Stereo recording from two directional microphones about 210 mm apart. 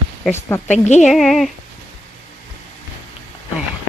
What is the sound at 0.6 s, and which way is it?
Speech, 35° left (ahead or behind).